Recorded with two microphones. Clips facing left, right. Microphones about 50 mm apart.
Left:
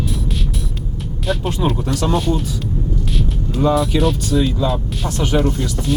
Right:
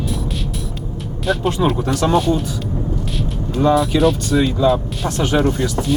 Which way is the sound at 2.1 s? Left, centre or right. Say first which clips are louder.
Right 3 dB; centre.